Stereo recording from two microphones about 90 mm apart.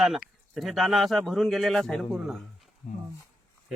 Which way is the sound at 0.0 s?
5° right (ahead or behind).